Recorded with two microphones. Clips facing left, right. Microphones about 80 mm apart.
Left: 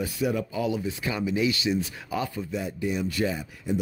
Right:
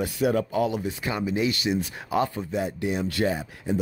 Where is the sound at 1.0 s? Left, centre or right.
Right.